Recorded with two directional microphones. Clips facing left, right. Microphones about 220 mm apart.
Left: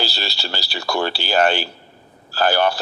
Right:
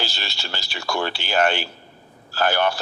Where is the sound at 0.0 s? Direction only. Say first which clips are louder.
Left 4 dB; 35° left (ahead or behind).